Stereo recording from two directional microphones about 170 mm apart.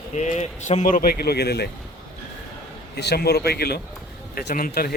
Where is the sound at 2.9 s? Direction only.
70° left (ahead or behind).